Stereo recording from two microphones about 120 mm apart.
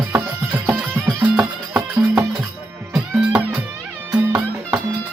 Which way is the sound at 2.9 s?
5° right (ahead or behind).